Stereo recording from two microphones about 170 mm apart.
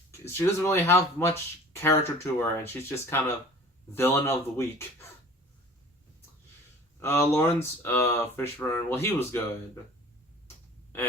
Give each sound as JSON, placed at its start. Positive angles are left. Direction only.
{"t": 0.1, "sound": "speech", "side_deg": 15}
{"t": 7.0, "sound": "speech", "side_deg": 15}